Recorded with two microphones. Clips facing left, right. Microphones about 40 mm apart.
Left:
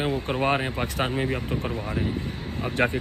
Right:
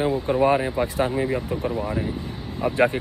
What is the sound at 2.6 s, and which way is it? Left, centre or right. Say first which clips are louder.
Speech: right 8 dB; left.